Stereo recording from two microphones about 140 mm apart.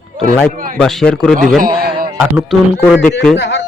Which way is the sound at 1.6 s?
90° right.